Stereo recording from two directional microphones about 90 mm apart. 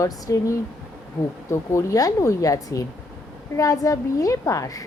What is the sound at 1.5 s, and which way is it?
Speech, 35° left (ahead or behind).